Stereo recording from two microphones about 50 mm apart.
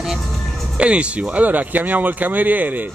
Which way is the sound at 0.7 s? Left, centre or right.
Right.